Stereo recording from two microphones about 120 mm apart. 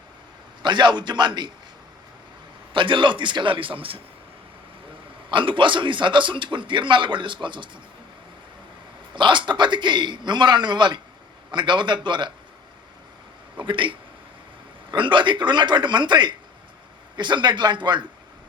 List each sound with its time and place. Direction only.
0.6 s a man's voice: 40° right (ahead or behind)
2.7 s a man's voice: 45° right (ahead or behind)
5.3 s a man's voice: 45° right (ahead or behind)
9.1 s a man's voice: 40° right (ahead or behind)
13.7 s a man's voice: 45° right (ahead or behind)